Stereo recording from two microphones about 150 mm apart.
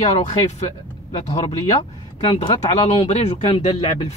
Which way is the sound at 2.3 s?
40° left (ahead or behind).